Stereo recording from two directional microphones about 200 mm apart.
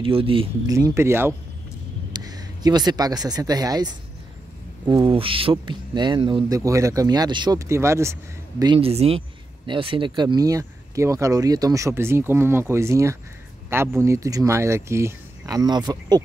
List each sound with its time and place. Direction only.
0.0 s speech: 25° right (ahead or behind)
0.7 s speech: 15° right (ahead or behind)
8.7 s speech: 30° right (ahead or behind)